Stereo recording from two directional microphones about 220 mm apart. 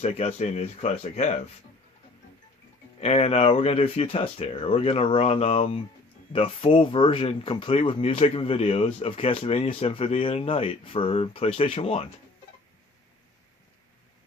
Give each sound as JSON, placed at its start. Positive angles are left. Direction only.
{"t": 0.0, "sound": "speech", "side_deg": 30}
{"t": 3.0, "sound": "speech", "side_deg": 30}